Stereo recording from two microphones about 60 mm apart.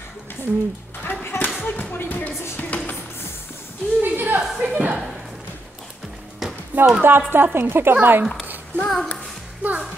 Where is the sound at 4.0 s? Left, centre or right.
Right.